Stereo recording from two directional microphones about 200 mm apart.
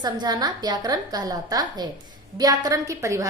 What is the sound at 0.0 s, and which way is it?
A woman's voice, 20° right (ahead or behind).